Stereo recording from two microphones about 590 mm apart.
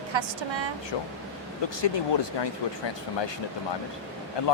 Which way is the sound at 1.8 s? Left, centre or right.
Left.